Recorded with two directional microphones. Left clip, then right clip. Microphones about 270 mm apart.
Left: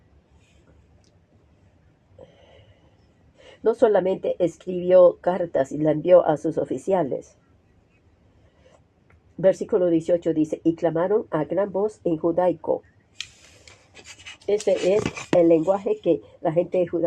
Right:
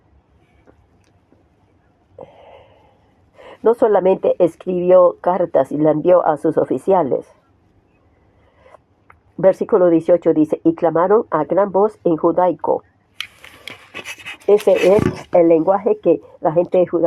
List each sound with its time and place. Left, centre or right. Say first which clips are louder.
3.6 s speech: right 5 dB; centre
9.6 s speech: right 8 dB; centre
13.7 s a sound: right 16 dB; right
14.4 s speech: right 9 dB; right